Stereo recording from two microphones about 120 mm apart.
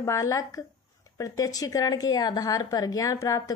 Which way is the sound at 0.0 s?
25° left (ahead or behind).